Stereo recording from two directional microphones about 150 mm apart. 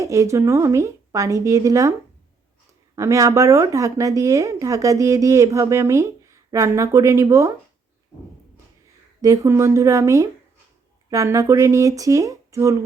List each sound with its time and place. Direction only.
0.0 s speech: 20° right (ahead or behind)
9.2 s speech: 20° right (ahead or behind)